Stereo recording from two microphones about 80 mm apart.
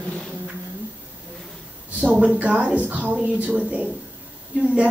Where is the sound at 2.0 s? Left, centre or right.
Centre.